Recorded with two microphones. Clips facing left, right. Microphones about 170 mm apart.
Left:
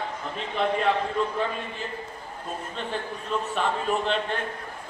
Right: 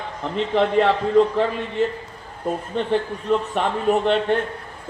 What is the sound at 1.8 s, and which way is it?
Speech, 70° right (ahead or behind).